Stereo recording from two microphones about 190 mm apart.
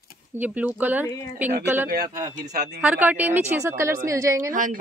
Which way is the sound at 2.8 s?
10° right (ahead or behind).